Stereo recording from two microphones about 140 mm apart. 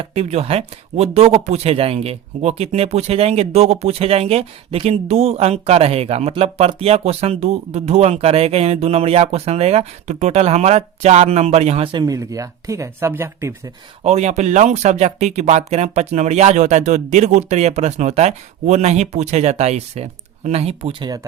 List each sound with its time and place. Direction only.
0.0 s speech: 50° right (ahead or behind)
12.0 s speech: 25° right (ahead or behind)
14.0 s speech: 50° right (ahead or behind)